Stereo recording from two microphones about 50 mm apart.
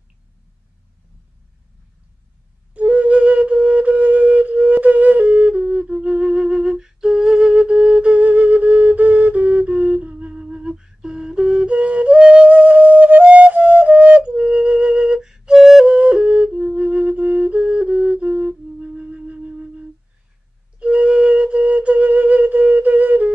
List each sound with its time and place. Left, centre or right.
2.7 s flute: right; by 15.8 s centre
15.8 s flute: right
18.8 s music: right
20.8 s flute: right